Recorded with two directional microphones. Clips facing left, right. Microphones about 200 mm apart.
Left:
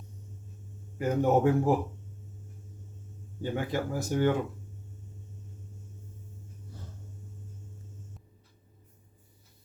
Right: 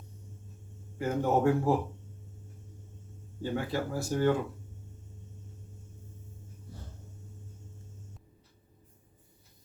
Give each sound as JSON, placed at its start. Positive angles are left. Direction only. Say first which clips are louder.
{"t": 0.9, "sound": "speech", "louder": "left 3 dB", "side_deg": 15}
{"t": 3.4, "sound": "speech", "louder": "left 1 dB", "side_deg": 20}